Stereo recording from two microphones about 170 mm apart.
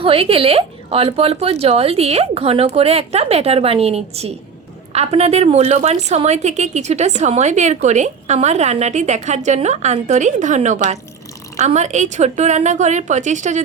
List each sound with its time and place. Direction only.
0.0 s a woman's voice: 35° right (ahead or behind)